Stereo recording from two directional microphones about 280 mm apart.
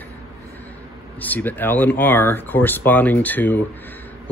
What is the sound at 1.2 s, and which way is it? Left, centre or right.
Speech, centre.